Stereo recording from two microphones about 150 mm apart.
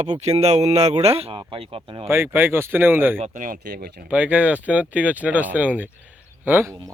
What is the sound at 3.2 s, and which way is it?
Speech, 60° right (ahead or behind).